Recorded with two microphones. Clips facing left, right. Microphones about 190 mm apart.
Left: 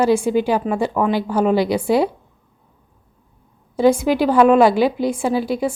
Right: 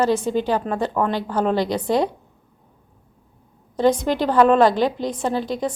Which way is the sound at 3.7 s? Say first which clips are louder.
Left 3 dB; 10° left (ahead or behind).